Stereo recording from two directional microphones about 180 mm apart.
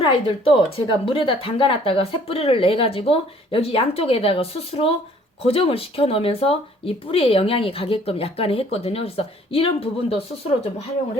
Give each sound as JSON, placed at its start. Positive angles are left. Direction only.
{"t": 0.0, "sound": "a woman's voice", "side_deg": 30}